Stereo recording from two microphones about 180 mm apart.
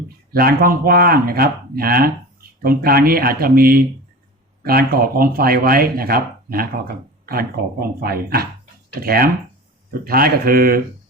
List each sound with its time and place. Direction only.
0.3 s speech: 55° right (ahead or behind)